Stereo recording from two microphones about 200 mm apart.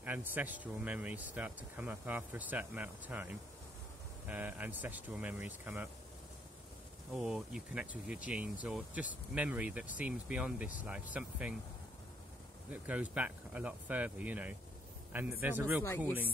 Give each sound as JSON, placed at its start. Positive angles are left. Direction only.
{"t": 0.0, "sound": "speech", "side_deg": -10}
{"t": 7.1, "sound": "speech", "side_deg": -5}
{"t": 12.7, "sound": "speech", "side_deg": -5}